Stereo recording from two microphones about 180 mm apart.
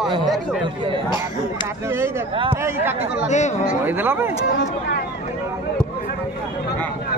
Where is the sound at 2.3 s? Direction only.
30° right (ahead or behind).